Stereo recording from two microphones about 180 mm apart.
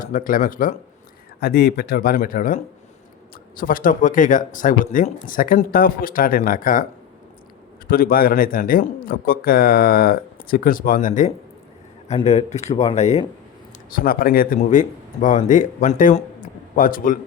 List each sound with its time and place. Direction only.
0.0 s a man's voice: 50° left (ahead or behind)
1.4 s speech: 60° left (ahead or behind)
3.6 s a man's voice: 50° left (ahead or behind)
7.9 s a man's voice: 55° left (ahead or behind)
12.0 s a man's voice: 35° left (ahead or behind)
13.9 s a man's voice: 55° left (ahead or behind)